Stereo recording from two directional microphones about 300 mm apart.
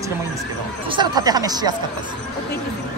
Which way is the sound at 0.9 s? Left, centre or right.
Centre.